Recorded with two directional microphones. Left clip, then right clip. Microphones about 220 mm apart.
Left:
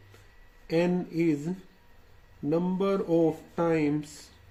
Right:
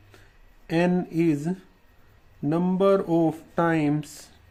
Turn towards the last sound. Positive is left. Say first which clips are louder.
# right 3 dB
turn(degrees=-45)  # may be behind; listen again after turning